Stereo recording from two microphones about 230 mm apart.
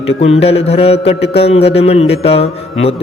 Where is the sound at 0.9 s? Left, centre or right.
Left.